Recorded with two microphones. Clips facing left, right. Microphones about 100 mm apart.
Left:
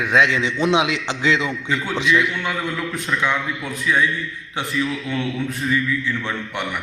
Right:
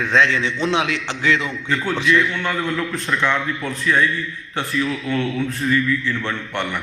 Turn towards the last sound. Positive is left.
turn(degrees=15)  # may be behind; listen again after turning